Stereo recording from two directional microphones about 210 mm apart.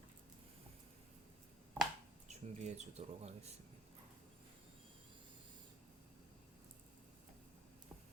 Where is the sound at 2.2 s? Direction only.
35° right (ahead or behind).